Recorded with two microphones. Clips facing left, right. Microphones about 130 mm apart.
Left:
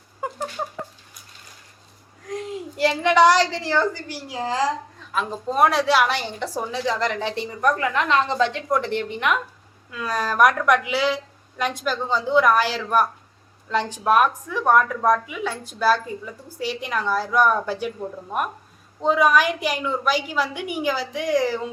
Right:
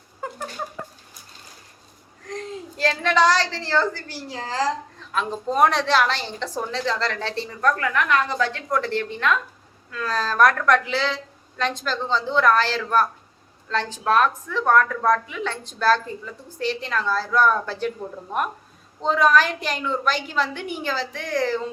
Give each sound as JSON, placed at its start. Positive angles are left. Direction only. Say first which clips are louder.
{"t": 2.2, "sound": "a woman's voice", "louder": "left 3 dB", "side_deg": 10}
{"t": 5.1, "sound": "a woman's voice", "louder": "even", "side_deg": 5}
{"t": 19.0, "sound": "a woman's voice", "louder": "left 1 dB", "side_deg": 10}